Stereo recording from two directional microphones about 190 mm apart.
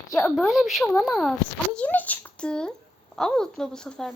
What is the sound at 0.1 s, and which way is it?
Speech, centre (ahead or behind).